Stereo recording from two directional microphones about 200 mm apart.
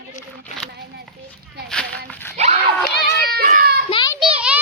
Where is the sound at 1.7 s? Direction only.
5° left (ahead or behind).